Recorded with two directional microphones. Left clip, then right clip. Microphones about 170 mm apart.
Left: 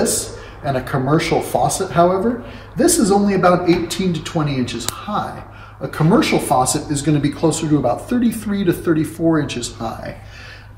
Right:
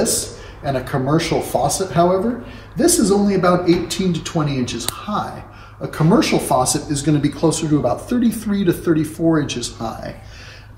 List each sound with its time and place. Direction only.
0.7 s a man's voice: 5° left (ahead or behind)